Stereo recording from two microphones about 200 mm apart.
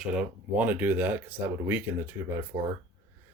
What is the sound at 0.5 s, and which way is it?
Speech, 10° right (ahead or behind).